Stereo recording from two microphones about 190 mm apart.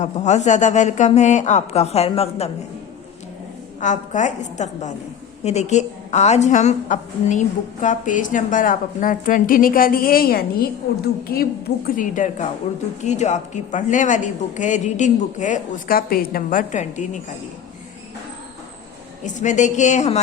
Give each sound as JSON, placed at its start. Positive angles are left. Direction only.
{"t": 0.0, "sound": "speech", "side_deg": 35}
{"t": 3.8, "sound": "a woman's voice", "side_deg": 40}
{"t": 19.2, "sound": "speech", "side_deg": 40}